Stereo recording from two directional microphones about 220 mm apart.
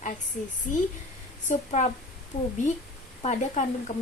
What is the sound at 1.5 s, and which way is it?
Speech, 35° left (ahead or behind).